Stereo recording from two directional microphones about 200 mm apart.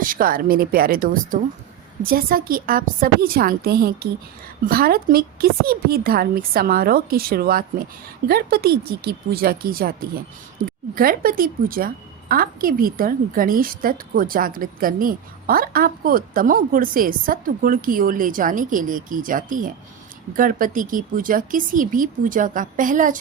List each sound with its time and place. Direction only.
0.0 s a woman's voice: 45° right (ahead or behind)